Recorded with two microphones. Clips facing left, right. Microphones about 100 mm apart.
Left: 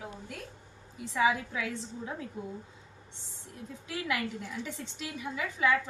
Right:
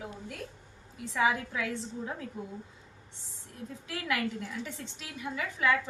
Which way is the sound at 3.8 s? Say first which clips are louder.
Right 1 dB; 5° left (ahead or behind).